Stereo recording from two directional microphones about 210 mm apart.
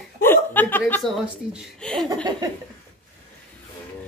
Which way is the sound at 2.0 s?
20° right (ahead or behind).